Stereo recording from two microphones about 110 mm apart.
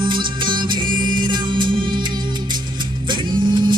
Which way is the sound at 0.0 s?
45° right (ahead or behind).